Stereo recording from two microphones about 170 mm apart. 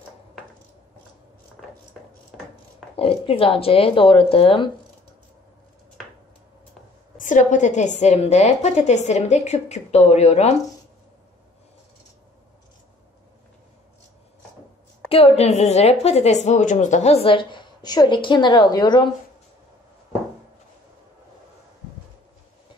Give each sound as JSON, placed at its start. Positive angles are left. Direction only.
{"t": 2.0, "sound": "a sound", "side_deg": 0}
{"t": 3.0, "sound": "a woman's voice", "side_deg": 35}
{"t": 7.2, "sound": "a woman's voice", "side_deg": 50}
{"t": 15.0, "sound": "a woman's voice", "side_deg": 35}